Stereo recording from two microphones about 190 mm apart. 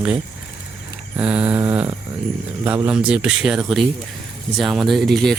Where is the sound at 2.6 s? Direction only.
10° right (ahead or behind).